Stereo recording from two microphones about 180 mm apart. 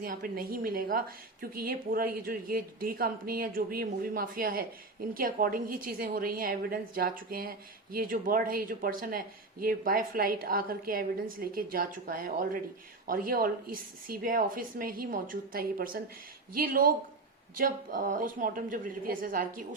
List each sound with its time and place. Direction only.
0.0 s a woman's voice: 50° right (ahead or behind)